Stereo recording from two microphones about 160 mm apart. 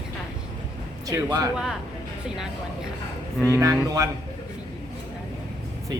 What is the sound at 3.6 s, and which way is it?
Speech, 20° right (ahead or behind).